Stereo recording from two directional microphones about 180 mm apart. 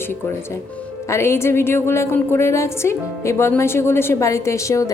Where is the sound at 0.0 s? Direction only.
15° left (ahead or behind).